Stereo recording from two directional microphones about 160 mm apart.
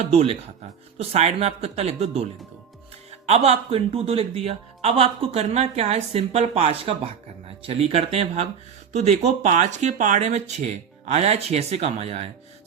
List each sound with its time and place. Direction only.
0.0 s speech: 40° right (ahead or behind)